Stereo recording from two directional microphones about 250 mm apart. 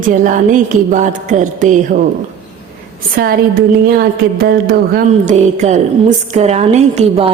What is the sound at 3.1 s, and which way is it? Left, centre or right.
A woman's voice, right.